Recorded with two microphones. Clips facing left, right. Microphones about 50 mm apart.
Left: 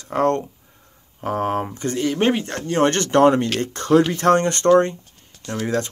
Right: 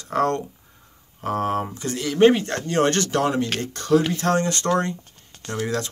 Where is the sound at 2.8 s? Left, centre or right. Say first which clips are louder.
Left 6 dB; left.